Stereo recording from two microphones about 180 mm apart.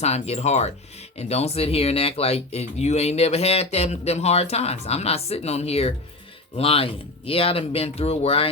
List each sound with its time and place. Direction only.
0.0 s speech: 35° left (ahead or behind)